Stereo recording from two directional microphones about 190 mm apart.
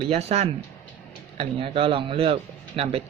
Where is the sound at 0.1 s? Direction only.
35° right (ahead or behind).